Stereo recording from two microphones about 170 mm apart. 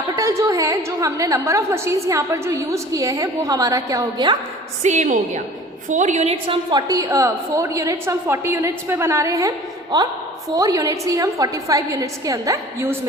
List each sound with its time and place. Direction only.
0.2 s a woman's voice: 20° right (ahead or behind)
4.8 s a woman's voice: 45° right (ahead or behind); by 9.5 s 15° right (ahead or behind)
10.5 s a woman's voice: 20° right (ahead or behind)